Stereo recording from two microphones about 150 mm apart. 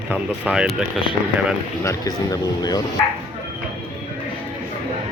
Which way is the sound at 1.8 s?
25° left (ahead or behind).